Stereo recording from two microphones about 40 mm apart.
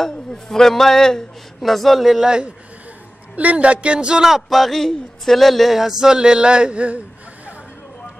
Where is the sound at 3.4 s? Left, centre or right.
Right.